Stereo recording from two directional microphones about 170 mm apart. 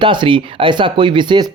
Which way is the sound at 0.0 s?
30° right (ahead or behind).